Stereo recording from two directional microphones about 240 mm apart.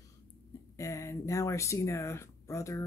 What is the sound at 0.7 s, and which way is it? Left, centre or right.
Speech, centre.